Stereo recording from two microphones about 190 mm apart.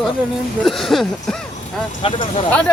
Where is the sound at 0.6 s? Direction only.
Centre (ahead or behind).